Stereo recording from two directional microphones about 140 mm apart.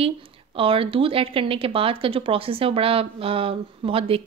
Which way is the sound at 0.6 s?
40° right (ahead or behind).